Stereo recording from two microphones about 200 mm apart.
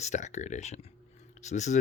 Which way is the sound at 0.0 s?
35° left (ahead or behind).